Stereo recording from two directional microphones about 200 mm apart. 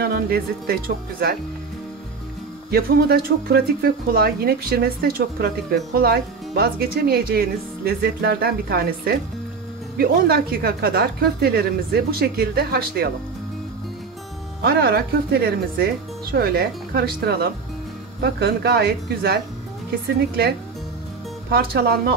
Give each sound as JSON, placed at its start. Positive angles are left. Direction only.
{"t": 0.0, "sound": "speech", "side_deg": -50}
{"t": 2.7, "sound": "speech", "side_deg": -50}
{"t": 14.6, "sound": "speech", "side_deg": -55}
{"t": 21.5, "sound": "speech", "side_deg": -55}